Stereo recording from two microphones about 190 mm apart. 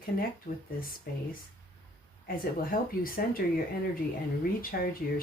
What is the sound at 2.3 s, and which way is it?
A woman's voice, 50° left (ahead or behind).